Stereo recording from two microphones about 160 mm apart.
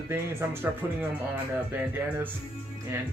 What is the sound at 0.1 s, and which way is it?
Speech, 15° right (ahead or behind).